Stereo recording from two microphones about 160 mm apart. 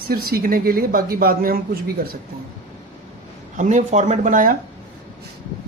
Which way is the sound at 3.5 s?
50° right (ahead or behind).